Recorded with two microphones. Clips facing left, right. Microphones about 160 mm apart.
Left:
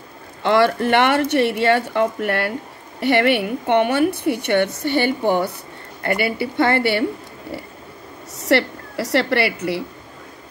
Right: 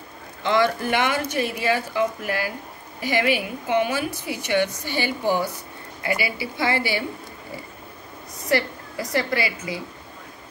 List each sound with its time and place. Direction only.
0.4 s a woman's voice: 60° left (ahead or behind)
8.5 s a woman's voice: 70° left (ahead or behind)